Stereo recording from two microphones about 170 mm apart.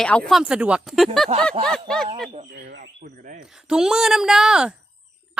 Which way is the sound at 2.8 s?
45° right (ahead or behind).